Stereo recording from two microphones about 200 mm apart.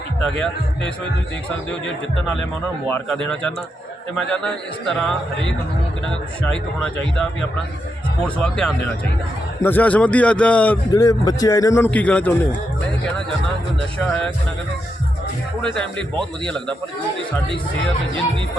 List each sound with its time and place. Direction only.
2.8 s a man's voice: 10° left (ahead or behind)
4.3 s a man's voice: 5° left (ahead or behind)
8.4 s a man's voice: 5° left (ahead or behind)
10.9 s a man's voice: 15° left (ahead or behind)
15.6 s a man's voice: 5° left (ahead or behind)